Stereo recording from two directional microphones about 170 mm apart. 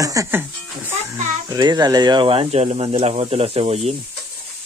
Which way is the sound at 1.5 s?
25° right (ahead or behind).